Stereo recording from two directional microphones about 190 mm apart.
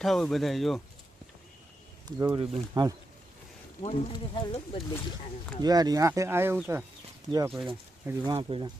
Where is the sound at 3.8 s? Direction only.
30° left (ahead or behind).